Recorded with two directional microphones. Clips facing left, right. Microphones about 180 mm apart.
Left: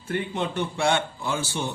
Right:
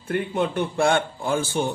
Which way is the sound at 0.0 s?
55° right (ahead or behind).